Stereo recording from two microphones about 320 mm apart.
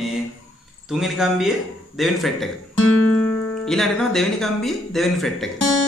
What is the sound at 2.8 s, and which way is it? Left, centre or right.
Guitar, left.